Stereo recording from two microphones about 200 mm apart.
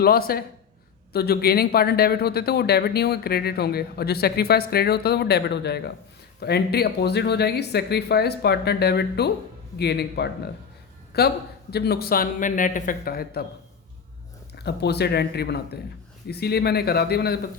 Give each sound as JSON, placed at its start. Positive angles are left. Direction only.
{"t": 0.0, "sound": "a man's voice", "side_deg": 50}
{"t": 14.5, "sound": "speech", "side_deg": 55}